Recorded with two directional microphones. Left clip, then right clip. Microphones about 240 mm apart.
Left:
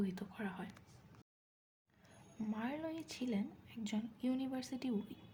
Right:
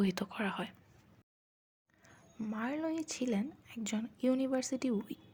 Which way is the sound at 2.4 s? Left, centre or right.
Right.